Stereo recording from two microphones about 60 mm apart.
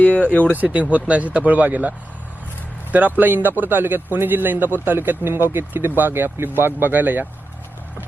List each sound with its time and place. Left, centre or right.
0.0 s speech: left
0.5 s speech: right